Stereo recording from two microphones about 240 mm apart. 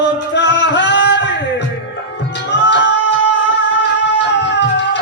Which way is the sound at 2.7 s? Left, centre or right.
Left.